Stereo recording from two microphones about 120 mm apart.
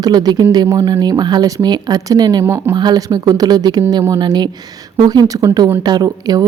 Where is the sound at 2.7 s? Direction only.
35° right (ahead or behind); by 5.8 s 20° right (ahead or behind).